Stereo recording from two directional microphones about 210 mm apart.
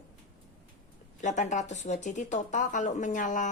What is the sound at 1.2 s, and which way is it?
Speech, 35° left (ahead or behind).